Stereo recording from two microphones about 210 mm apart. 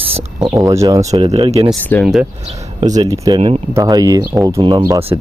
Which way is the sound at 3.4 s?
30° right (ahead or behind).